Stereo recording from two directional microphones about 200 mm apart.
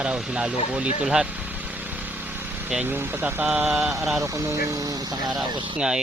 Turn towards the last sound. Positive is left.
turn(degrees=-25)  # may be behind; listen again after turning